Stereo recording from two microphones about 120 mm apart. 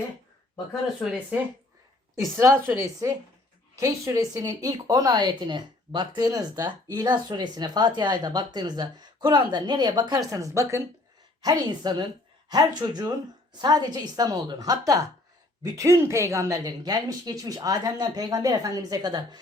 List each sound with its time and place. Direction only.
1.3 s speech: 10° right (ahead or behind)
11.4 s speech: 35° right (ahead or behind)